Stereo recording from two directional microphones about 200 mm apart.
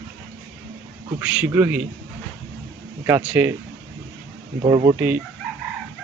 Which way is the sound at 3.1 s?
10° right (ahead or behind).